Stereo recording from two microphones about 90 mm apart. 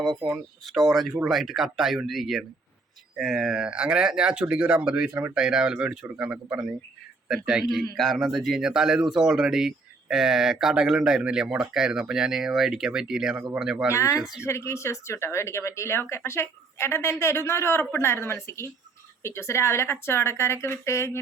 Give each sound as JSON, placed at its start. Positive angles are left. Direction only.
{"t": 0.0, "sound": "a man's voice", "side_deg": 0}
{"t": 13.9, "sound": "speech", "side_deg": 35}
{"t": 14.2, "sound": "speech", "side_deg": -5}
{"t": 14.4, "sound": "speech", "side_deg": 30}